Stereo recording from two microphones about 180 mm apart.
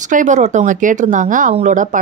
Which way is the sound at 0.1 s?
45° right (ahead or behind).